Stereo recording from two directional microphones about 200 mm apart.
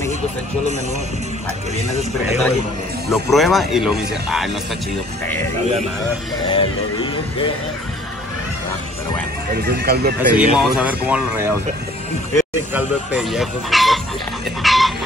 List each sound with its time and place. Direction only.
3.1 s speech: centre (ahead or behind)
6.5 s speech: 25° left (ahead or behind)
9.6 s speech: 50° right (ahead or behind)
10.3 s speech: 5° right (ahead or behind)
12.7 s speech: 5° right (ahead or behind)
14.6 s chicken: centre (ahead or behind)